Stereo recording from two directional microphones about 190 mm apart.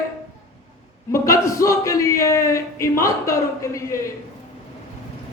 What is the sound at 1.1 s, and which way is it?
Speech, 15° left (ahead or behind).